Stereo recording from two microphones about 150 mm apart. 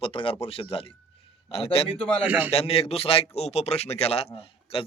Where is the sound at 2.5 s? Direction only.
40° left (ahead or behind).